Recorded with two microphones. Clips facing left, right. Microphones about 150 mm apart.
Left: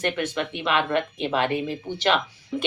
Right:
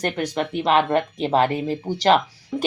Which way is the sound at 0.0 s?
40° right (ahead or behind).